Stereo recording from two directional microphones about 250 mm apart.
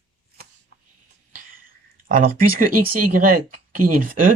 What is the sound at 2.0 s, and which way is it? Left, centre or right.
Speech, right.